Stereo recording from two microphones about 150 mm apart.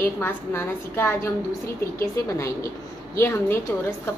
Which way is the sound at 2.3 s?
20° left (ahead or behind).